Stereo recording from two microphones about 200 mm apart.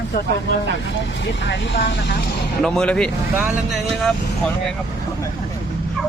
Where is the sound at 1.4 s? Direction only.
60° left (ahead or behind).